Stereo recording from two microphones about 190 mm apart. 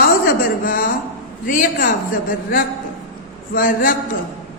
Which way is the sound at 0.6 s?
45° left (ahead or behind).